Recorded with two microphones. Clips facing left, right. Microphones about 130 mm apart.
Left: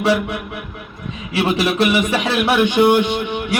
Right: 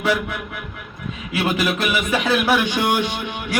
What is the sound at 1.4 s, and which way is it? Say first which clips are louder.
Speech: left 4 dB; 30° left (ahead or behind).